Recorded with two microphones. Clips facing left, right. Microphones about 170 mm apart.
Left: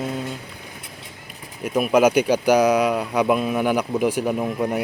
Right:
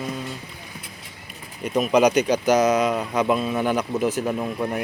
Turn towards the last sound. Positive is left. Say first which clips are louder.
# left 3 dB
turn(degrees=10)  # may be behind; listen again after turning